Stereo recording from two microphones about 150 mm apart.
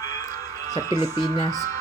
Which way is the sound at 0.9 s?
25° left (ahead or behind).